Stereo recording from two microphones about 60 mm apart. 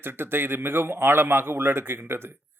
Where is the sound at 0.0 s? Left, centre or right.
Right.